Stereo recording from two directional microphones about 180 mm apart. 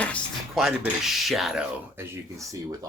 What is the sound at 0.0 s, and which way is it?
Speech, 5° left (ahead or behind).